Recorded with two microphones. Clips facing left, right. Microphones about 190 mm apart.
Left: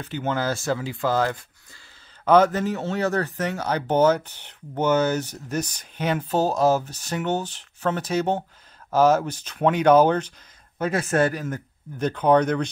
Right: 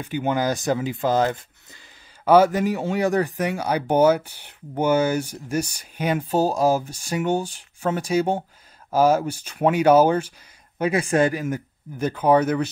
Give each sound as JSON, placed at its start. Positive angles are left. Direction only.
{"t": 0.0, "sound": "speech", "side_deg": -15}
{"t": 2.2, "sound": "speech", "side_deg": -10}